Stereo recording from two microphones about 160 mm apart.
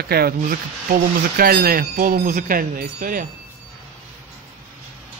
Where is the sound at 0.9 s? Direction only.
65° right (ahead or behind).